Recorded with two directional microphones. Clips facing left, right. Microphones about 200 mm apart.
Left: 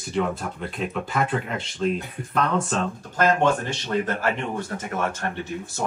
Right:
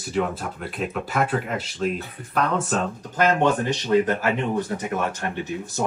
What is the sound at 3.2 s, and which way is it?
Speech, 20° right (ahead or behind).